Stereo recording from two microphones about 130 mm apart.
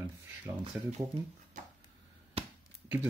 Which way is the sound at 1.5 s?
75° right (ahead or behind).